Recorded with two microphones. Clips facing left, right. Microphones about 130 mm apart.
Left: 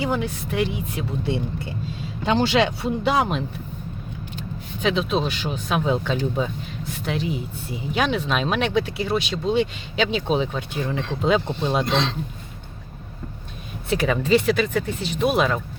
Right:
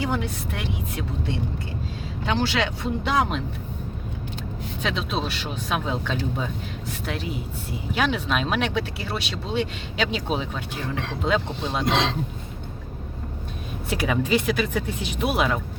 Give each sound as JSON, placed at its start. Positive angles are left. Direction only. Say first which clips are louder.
{"t": 0.0, "sound": "speech", "louder": "left 2 dB", "side_deg": 0}
{"t": 2.2, "sound": "speech", "louder": "left 5 dB", "side_deg": 20}
{"t": 3.1, "sound": "speech", "louder": "left 2 dB", "side_deg": 5}
{"t": 4.8, "sound": "speech", "louder": "left 6 dB", "side_deg": 0}
{"t": 13.9, "sound": "speech", "louder": "left 4 dB", "side_deg": -10}